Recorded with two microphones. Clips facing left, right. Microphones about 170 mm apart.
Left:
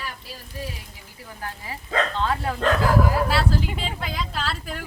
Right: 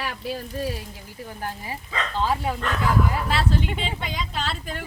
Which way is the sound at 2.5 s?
70° left (ahead or behind).